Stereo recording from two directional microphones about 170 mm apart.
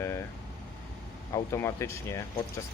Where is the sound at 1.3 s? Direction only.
15° left (ahead or behind).